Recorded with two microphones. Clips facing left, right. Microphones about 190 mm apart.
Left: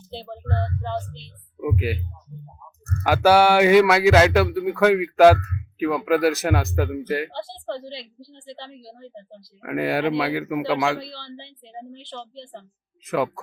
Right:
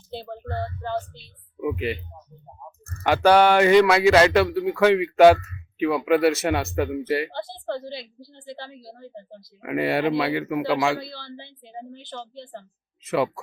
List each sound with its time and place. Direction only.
0.2 s speech: centre (ahead or behind)
3.0 s speech: 5° left (ahead or behind)
7.3 s a woman's voice: 25° left (ahead or behind)
7.7 s speech: centre (ahead or behind)